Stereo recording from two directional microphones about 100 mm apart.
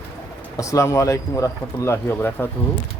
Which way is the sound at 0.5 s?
30° left (ahead or behind).